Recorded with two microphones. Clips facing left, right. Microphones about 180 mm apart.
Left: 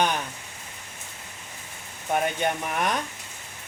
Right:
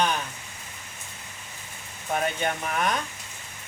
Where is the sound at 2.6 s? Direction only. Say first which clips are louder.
Even; 15° left (ahead or behind).